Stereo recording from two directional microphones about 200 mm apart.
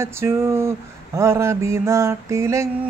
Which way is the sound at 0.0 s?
15° right (ahead or behind).